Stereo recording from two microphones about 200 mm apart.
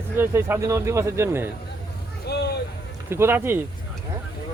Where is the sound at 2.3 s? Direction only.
55° left (ahead or behind).